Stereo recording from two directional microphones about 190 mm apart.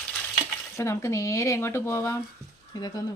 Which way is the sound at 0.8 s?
15° left (ahead or behind).